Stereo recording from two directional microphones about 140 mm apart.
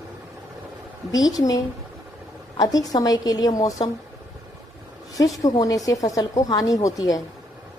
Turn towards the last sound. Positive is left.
turn(degrees=25)  # may be behind; listen again after turning